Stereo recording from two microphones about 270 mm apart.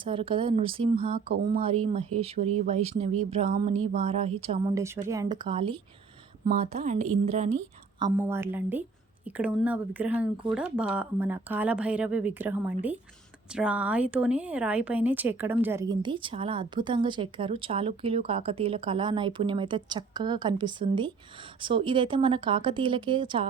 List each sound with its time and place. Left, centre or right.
0.0 s a woman's voice: centre